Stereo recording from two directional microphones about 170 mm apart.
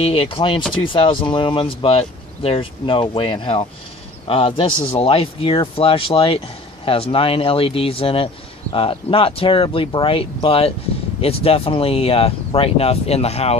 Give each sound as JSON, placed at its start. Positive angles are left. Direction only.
{"t": 0.0, "sound": "speech", "side_deg": 35}